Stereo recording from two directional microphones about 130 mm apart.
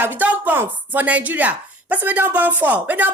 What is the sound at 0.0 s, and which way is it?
Speech, 15° right (ahead or behind).